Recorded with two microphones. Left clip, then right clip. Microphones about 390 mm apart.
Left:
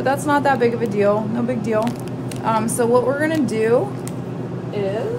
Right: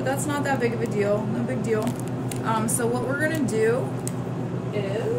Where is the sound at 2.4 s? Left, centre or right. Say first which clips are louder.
Left 6 dB; centre.